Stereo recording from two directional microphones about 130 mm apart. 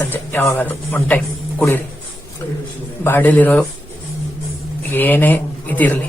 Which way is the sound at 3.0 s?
15° left (ahead or behind).